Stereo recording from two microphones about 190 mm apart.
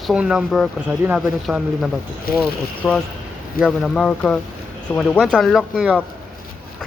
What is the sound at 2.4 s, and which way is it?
Speech, 10° left (ahead or behind).